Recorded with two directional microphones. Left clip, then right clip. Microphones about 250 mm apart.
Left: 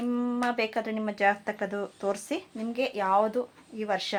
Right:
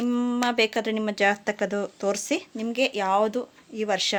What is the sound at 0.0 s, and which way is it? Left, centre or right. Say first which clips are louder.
Speech: right 4 dB; right.